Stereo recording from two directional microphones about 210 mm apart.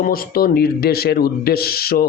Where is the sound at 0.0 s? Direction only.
45° left (ahead or behind).